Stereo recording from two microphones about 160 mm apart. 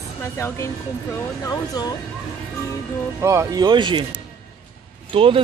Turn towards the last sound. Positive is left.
turn(degrees=-35)  # may be behind; listen again after turning